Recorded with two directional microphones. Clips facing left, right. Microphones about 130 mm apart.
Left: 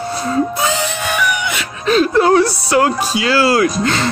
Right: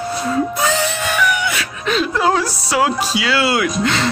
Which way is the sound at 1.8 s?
45° left (ahead or behind).